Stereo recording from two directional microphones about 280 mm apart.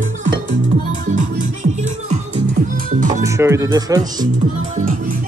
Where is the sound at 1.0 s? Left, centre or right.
Right.